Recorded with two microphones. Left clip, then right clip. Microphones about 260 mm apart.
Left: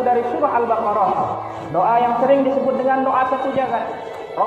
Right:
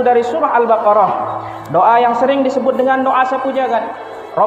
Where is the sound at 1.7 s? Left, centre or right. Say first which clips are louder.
Right 6 dB; right.